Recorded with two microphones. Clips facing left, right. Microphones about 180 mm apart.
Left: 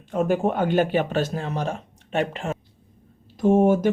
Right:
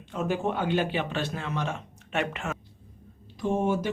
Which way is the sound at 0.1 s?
50° left (ahead or behind).